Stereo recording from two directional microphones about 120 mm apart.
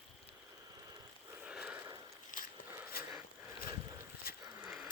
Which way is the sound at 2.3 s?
90° left.